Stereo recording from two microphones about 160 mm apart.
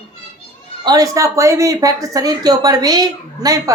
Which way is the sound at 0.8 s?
20° right (ahead or behind).